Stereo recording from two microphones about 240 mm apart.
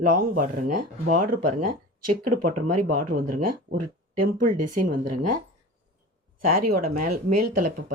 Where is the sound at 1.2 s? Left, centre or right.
Right.